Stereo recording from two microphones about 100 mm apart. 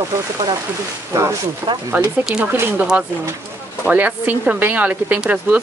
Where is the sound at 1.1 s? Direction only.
30° right (ahead or behind).